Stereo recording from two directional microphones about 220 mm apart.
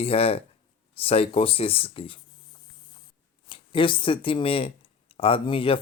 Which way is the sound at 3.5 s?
20° left (ahead or behind).